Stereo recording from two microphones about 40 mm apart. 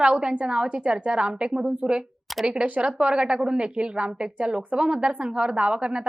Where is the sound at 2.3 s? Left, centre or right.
Centre.